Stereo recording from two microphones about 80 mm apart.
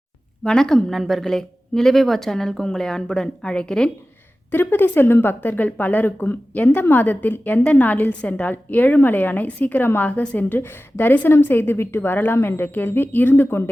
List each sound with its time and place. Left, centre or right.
0.4 s speech: centre
4.5 s a woman's voice: left